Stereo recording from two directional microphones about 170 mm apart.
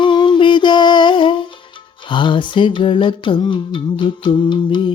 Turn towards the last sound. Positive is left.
turn(degrees=25)  # may be behind; listen again after turning